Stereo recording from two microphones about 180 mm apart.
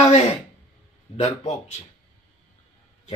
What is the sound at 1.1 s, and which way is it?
Speech, 35° left (ahead or behind).